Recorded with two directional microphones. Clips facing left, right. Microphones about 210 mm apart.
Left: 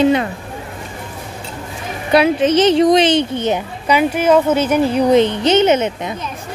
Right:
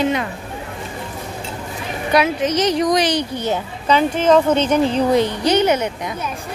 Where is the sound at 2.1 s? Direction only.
30° left (ahead or behind).